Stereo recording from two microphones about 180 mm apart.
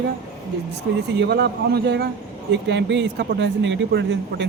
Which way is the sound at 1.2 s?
65° right (ahead or behind).